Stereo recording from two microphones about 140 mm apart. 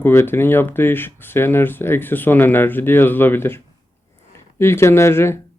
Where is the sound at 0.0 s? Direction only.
15° left (ahead or behind).